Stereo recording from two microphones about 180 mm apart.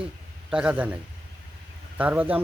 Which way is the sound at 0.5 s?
5° right (ahead or behind).